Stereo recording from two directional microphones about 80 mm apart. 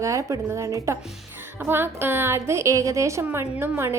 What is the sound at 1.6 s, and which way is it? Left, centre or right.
A woman's voice, right.